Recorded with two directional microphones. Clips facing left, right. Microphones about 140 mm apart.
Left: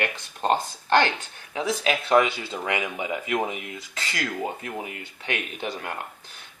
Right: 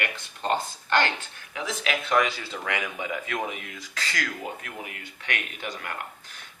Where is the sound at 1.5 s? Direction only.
30° left (ahead or behind).